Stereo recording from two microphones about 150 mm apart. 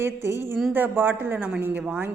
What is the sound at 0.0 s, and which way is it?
A woman's voice, 15° right (ahead or behind).